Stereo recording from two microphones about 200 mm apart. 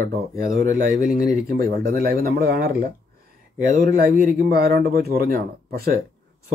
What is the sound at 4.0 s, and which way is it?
Speech, 50° right (ahead or behind).